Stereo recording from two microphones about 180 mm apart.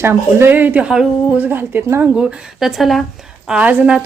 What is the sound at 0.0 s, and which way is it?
A woman's voice, 15° right (ahead or behind).